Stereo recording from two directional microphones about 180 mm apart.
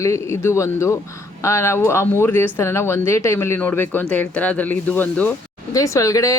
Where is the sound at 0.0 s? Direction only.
15° left (ahead or behind).